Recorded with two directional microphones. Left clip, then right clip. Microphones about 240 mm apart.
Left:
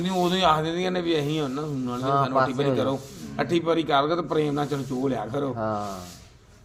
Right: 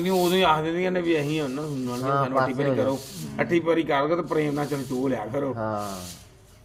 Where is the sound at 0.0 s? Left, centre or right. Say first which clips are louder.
Right 1 dB; left.